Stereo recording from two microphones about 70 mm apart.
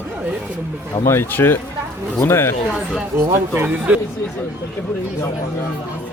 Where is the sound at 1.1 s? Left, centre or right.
Left.